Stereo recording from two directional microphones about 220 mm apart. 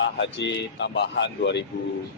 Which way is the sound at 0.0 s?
55° left (ahead or behind).